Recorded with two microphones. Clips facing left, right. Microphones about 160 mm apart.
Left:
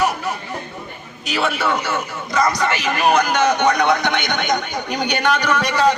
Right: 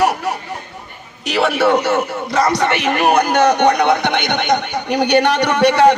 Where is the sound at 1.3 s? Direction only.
65° right (ahead or behind).